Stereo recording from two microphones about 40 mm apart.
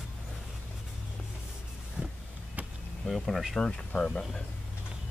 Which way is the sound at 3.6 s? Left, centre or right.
Left.